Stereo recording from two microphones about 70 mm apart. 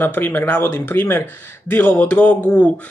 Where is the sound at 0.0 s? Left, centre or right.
Left.